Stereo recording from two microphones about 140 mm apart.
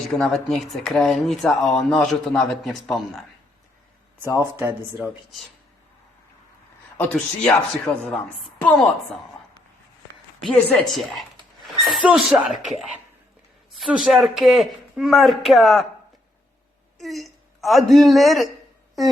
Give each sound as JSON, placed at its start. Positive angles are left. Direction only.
{"t": 0.2, "sound": "speech", "side_deg": 5}
{"t": 4.4, "sound": "speech", "side_deg": -15}
{"t": 6.9, "sound": "a man's voice", "side_deg": 10}
{"t": 10.4, "sound": "speech", "side_deg": 5}
{"t": 13.7, "sound": "speech", "side_deg": -5}
{"t": 17.0, "sound": "a woman's voice", "side_deg": 0}